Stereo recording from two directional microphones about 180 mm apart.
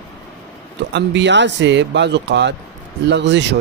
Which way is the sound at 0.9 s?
80° right.